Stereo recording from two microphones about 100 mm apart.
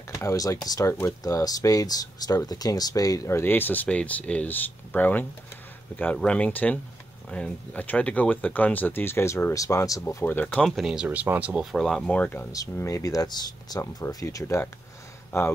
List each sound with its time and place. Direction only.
0.2 s speech: 30° left (ahead or behind)
10.0 s speech: 20° left (ahead or behind)
10.6 s speech: 5° right (ahead or behind)
11.1 s speech: 15° right (ahead or behind); by 12.1 s centre (ahead or behind)
12.1 s speech: 15° left (ahead or behind)
12.7 s speech: 30° left (ahead or behind)
14.0 s speech: 30° left (ahead or behind)